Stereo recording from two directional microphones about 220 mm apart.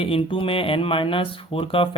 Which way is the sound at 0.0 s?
25° left (ahead or behind).